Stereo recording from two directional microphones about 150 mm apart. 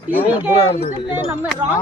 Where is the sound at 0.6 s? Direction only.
35° left (ahead or behind).